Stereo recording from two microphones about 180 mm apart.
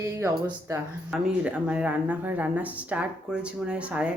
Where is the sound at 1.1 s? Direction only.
5° right (ahead or behind).